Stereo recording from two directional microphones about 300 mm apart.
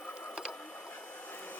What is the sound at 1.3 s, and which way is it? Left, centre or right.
Vacuum cleaner, centre.